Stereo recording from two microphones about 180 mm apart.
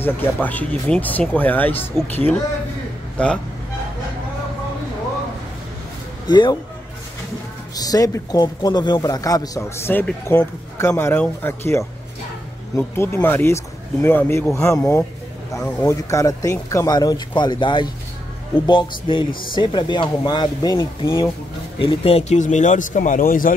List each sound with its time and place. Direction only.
0.0 s a man's voice: 10° left (ahead or behind)
3.2 s a man's voice: 5° left (ahead or behind)
6.2 s speech: 25° left (ahead or behind)
7.7 s a man's voice: 20° left (ahead or behind); by 23.5 s 50° left (ahead or behind)